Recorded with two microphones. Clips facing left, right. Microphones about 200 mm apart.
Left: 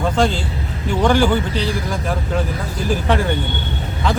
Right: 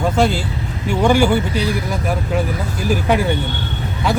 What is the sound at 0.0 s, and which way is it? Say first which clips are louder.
Speech: right 1 dB; 10° right (ahead or behind).